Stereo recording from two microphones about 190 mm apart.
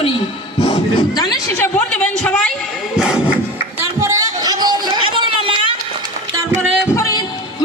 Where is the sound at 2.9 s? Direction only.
5° right (ahead or behind).